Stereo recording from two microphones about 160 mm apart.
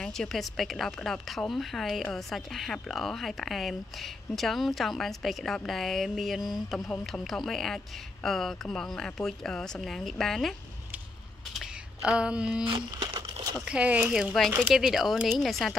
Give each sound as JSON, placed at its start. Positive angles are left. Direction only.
{"t": 0.0, "sound": "speech", "side_deg": 5}
{"t": 11.5, "sound": "a sound", "side_deg": -5}
{"t": 12.6, "sound": "crumpling", "side_deg": -35}
{"t": 13.7, "sound": "speech", "side_deg": -5}